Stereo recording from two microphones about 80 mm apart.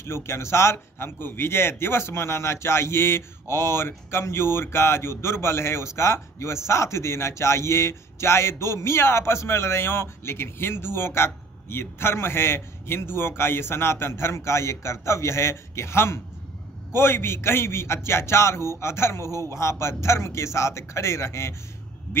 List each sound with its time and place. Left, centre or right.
0.0 s a man's voice: left